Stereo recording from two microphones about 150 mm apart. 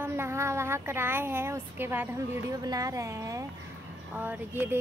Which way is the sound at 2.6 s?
25° right (ahead or behind).